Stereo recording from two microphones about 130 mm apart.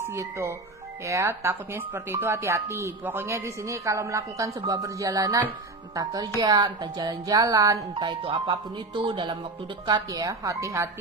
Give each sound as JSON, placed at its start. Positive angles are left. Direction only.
{"t": 0.0, "sound": "speech", "side_deg": -20}